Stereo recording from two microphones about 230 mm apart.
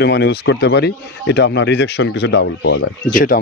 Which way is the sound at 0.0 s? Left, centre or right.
Left.